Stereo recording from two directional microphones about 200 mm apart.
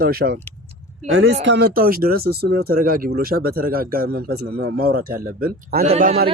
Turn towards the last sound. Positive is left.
turn(degrees=-35)  # may be behind; listen again after turning